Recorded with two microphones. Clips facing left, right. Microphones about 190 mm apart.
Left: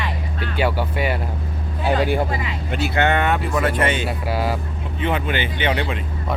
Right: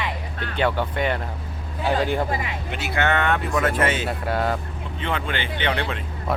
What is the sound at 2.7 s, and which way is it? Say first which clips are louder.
Speech: left 6 dB; 35° left (ahead or behind).